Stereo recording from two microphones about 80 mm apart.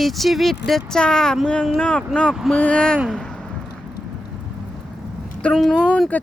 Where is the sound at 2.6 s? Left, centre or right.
Centre.